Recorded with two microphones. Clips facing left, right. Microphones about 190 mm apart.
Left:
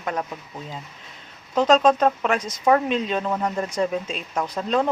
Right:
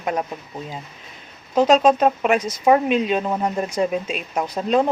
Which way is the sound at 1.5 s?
10° right (ahead or behind).